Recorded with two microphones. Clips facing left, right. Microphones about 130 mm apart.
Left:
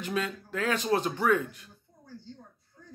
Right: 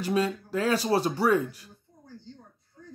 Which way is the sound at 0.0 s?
35° right (ahead or behind).